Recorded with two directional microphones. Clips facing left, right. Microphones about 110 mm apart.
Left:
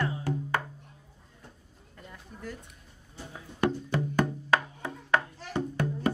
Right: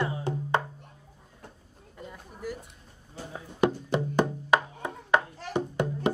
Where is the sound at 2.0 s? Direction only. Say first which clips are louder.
Right 4 dB; 10° right (ahead or behind).